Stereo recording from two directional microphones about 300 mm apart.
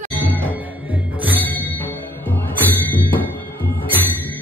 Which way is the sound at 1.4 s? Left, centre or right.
Centre.